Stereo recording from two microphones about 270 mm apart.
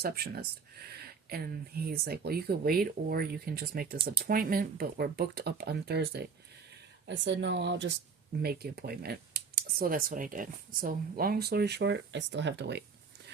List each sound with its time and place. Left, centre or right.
0.0 s speech: right